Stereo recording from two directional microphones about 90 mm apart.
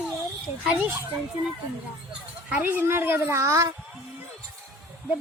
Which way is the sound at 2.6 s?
20° right (ahead or behind).